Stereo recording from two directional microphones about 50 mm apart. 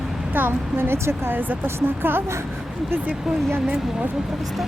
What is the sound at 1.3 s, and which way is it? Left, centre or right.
Speech, right.